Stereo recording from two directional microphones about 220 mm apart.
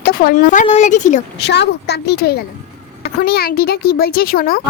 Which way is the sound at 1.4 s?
50° left (ahead or behind).